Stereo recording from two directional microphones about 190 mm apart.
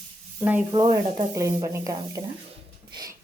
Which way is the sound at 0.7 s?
25° right (ahead or behind).